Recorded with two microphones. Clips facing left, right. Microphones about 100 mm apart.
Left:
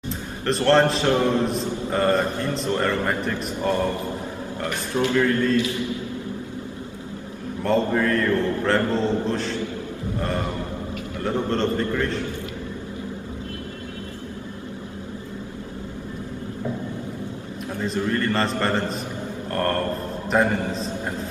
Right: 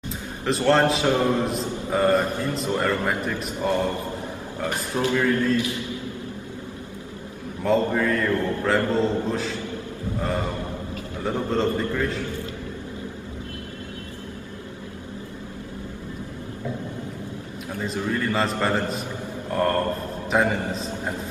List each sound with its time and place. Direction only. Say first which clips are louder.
0.5 s mantra: left 1 dB; centre (ahead or behind)
5.0 s speech: left 1 dB; 15° right (ahead or behind)
7.6 s mantra: even; centre (ahead or behind)
11.1 s mantra: left 1 dB; 5° right (ahead or behind)
17.7 s a man's voice: left 3 dB; 5° right (ahead or behind)
18.1 s mantra: right 1 dB; 5° right (ahead or behind)